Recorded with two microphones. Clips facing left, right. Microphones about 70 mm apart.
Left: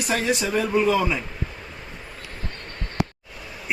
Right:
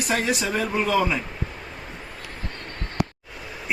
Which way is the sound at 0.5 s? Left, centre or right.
Right.